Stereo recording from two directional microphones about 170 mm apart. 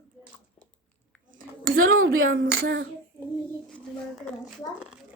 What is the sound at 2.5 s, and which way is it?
Speech, 85° right.